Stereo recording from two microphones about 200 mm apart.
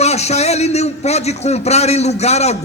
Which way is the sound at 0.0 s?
35° left (ahead or behind).